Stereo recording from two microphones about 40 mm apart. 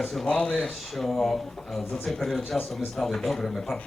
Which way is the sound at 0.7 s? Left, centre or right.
Centre.